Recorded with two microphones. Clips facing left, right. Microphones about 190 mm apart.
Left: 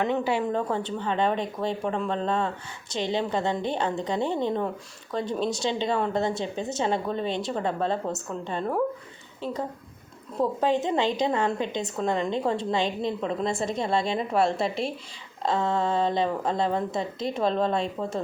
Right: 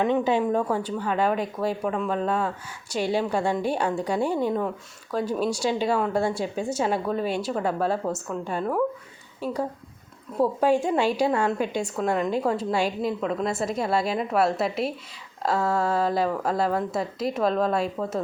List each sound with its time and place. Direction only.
0.0 s a woman's voice: 15° right (ahead or behind)